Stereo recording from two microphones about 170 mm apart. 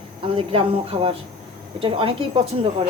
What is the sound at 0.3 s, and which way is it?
A woman's voice, 30° right (ahead or behind).